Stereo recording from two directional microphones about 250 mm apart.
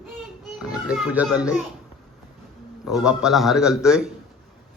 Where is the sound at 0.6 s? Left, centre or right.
Centre.